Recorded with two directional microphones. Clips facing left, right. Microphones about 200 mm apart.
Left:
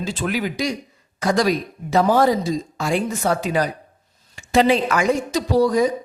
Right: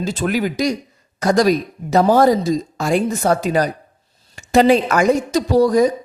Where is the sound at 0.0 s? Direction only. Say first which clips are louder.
Right 4 dB; 40° right (ahead or behind).